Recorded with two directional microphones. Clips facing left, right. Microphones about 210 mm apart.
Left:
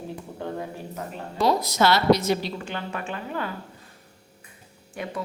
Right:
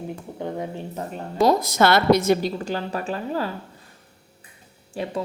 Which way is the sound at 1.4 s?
45° right (ahead or behind).